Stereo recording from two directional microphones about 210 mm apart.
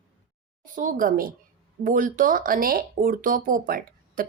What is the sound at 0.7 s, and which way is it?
Speech, 40° right (ahead or behind).